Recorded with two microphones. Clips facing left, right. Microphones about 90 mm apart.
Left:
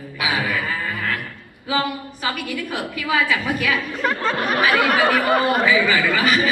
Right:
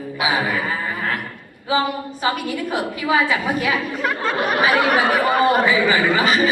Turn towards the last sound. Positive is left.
turn(degrees=-30)  # may be behind; listen again after turning